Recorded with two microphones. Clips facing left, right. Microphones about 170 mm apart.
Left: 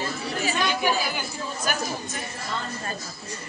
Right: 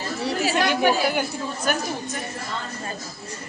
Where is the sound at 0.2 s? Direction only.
80° right.